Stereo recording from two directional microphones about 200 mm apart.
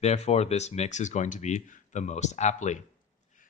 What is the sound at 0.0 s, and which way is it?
Speech, 35° left (ahead or behind).